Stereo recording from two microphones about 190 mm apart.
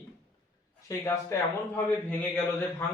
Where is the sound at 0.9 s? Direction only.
15° left (ahead or behind).